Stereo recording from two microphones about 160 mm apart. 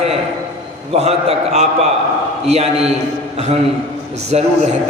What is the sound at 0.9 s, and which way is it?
Speech, 40° right (ahead or behind).